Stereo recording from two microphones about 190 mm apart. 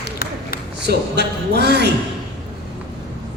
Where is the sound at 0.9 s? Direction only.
60° right (ahead or behind).